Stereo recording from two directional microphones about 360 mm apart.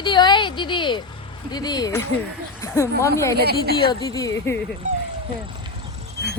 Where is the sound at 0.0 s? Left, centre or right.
Centre.